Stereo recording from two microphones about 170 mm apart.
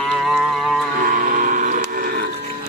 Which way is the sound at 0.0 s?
Centre (ahead or behind).